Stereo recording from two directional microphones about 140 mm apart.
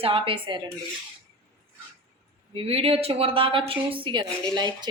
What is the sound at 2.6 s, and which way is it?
Speech, 45° right (ahead or behind).